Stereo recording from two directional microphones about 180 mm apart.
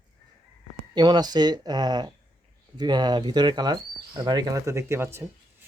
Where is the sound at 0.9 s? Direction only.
25° right (ahead or behind).